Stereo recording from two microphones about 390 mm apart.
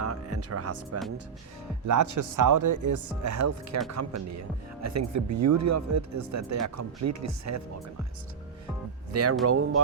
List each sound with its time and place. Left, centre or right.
0.0 s music: right
1.9 s speech: right
9.4 s speech: right